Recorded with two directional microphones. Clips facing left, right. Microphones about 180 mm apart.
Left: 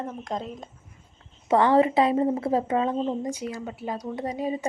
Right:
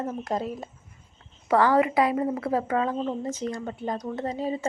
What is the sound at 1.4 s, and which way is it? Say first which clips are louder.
Speech: left 1 dB; 25° left (ahead or behind).